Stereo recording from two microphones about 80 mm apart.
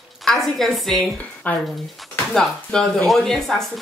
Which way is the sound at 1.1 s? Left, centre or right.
Centre.